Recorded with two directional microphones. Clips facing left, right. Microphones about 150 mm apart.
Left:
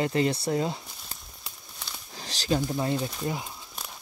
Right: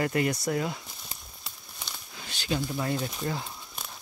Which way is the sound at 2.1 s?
35° left (ahead or behind).